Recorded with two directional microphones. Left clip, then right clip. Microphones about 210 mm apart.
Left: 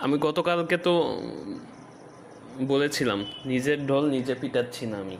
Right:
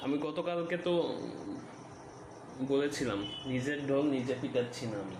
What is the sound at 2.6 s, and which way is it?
Speech, 30° left (ahead or behind).